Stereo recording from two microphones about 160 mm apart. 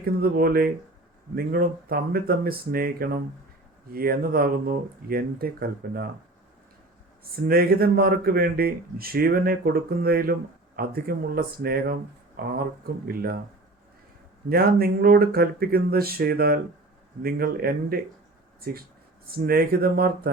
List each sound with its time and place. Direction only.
0.0 s speech: 70° right (ahead or behind)
7.4 s speech: 70° right (ahead or behind)
14.5 s speech: 70° right (ahead or behind)
19.3 s speech: 70° right (ahead or behind)